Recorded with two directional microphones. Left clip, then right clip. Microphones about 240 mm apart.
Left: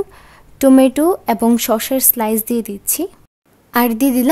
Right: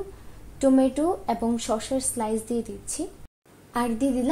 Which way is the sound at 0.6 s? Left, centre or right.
Left.